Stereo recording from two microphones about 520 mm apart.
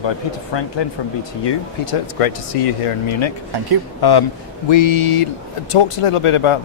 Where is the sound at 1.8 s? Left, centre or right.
Left.